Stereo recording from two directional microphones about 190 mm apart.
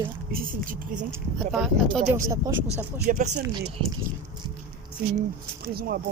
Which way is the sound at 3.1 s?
45° right (ahead or behind).